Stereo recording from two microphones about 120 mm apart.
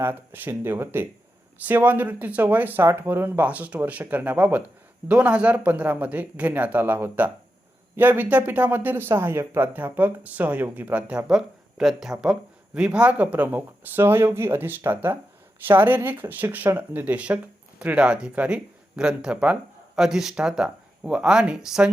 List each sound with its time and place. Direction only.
0.0 s speech: 20° right (ahead or behind)